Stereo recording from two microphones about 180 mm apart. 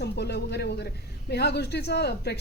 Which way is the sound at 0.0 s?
65° left (ahead or behind).